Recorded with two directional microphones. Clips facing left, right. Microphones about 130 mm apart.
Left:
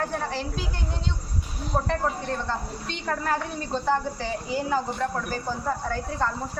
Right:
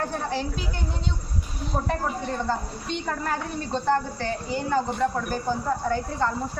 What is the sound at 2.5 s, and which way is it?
A woman's voice, 5° right (ahead or behind).